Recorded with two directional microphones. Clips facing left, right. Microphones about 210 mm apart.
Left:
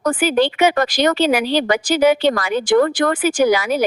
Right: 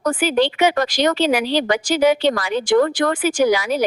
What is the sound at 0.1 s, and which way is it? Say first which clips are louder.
A woman's voice: left 1 dB; 55° left (ahead or behind).